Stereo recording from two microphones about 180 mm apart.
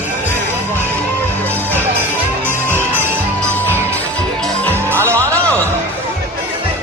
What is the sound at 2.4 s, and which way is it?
Music, 10° right (ahead or behind).